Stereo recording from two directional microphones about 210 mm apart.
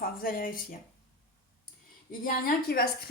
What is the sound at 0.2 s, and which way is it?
Speech, 45° left (ahead or behind).